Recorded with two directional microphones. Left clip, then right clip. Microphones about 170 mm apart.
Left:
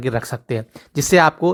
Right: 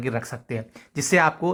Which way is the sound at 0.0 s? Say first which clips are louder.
Left 5 dB; 35° left (ahead or behind).